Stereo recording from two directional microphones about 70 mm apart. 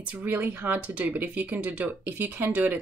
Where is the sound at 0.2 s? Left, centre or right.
Right.